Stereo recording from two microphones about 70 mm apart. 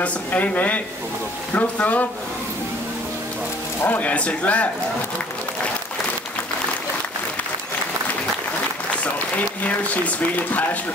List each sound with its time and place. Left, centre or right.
0.0 s speech: left
3.8 s speech: left
9.6 s speech: left